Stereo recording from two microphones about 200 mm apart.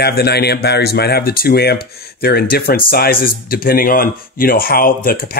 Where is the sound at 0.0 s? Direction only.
55° left (ahead or behind).